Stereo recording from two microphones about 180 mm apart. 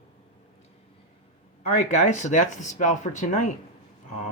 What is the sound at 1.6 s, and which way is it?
Speech, 40° left (ahead or behind).